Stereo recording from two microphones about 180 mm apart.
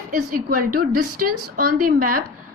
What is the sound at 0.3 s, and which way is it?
A woman's voice, 50° right (ahead or behind).